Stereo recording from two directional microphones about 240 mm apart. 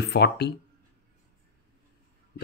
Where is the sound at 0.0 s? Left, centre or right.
Left.